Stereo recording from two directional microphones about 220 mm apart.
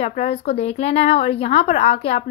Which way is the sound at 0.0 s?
30° left (ahead or behind).